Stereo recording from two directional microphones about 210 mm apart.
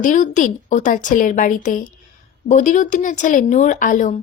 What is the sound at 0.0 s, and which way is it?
A woman's voice, 35° left (ahead or behind).